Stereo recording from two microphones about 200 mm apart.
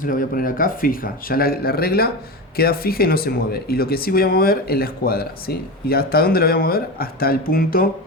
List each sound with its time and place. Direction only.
0.0 s speech: 45° left (ahead or behind)